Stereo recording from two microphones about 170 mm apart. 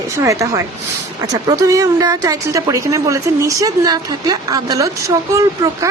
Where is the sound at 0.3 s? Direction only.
20° right (ahead or behind).